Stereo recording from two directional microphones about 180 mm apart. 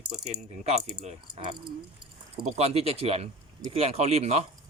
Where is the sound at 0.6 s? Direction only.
40° right (ahead or behind).